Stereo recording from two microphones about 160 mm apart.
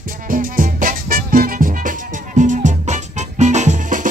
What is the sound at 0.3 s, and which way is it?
Music, 55° right (ahead or behind).